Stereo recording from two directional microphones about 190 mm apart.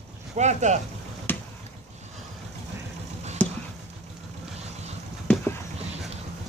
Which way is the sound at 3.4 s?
5° left (ahead or behind).